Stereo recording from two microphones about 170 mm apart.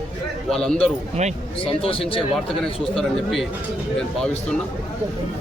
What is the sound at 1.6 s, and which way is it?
Speech, 35° left (ahead or behind).